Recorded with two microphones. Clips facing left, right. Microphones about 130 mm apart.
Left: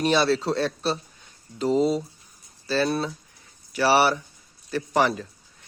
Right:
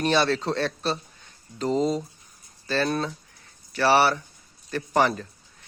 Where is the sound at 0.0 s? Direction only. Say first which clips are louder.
Left 1 dB; 10° left (ahead or behind).